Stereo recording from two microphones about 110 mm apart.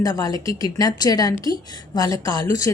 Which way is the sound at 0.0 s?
35° left (ahead or behind).